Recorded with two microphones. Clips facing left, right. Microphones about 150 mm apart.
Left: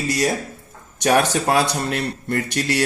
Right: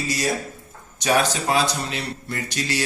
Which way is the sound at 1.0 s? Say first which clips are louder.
Left 3 dB; 60° left (ahead or behind).